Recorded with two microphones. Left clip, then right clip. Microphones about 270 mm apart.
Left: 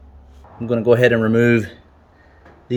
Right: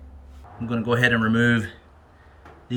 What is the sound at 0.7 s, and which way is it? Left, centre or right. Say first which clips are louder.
Speech: left 7 dB; centre.